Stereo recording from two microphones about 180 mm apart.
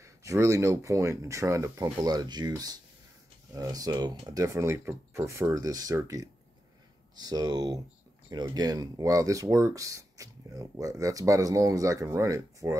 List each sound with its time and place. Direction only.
0.0 s speech: 15° right (ahead or behind)